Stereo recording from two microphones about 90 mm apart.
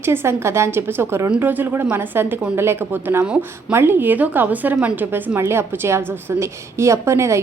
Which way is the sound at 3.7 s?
25° right (ahead or behind).